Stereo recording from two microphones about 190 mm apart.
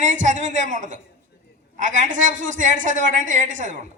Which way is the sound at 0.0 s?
40° right (ahead or behind).